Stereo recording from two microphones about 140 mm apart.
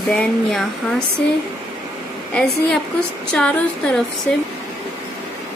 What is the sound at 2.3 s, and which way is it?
Speech, 5° left (ahead or behind).